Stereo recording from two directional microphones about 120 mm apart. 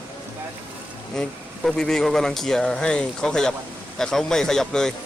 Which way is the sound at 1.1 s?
5° left (ahead or behind).